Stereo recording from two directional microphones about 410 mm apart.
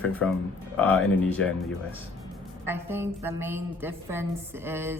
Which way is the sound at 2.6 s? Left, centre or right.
Centre.